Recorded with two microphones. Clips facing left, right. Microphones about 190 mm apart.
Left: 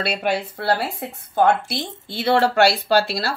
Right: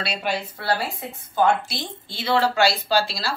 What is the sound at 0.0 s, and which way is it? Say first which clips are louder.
Speech: left 4 dB; 60° left (ahead or behind).